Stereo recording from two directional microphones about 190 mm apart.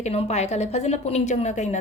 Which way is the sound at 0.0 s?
35° left (ahead or behind).